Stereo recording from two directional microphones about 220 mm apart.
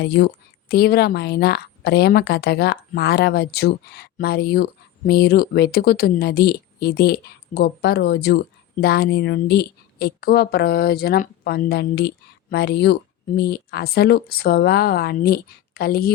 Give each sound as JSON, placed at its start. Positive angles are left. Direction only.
{"t": 0.0, "sound": "a woman's voice", "side_deg": 45}